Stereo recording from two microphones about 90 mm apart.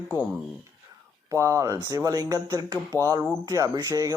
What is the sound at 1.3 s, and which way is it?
A man's voice, 35° right (ahead or behind).